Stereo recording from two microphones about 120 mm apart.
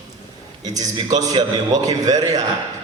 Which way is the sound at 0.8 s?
30° right (ahead or behind).